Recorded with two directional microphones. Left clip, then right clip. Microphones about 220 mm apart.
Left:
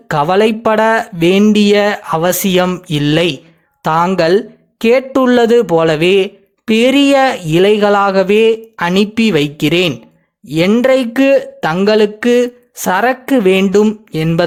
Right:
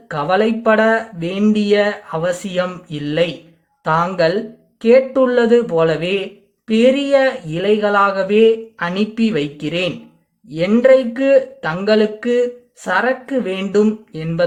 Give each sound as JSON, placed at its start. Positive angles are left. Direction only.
{"t": 0.1, "sound": "speech", "side_deg": 40}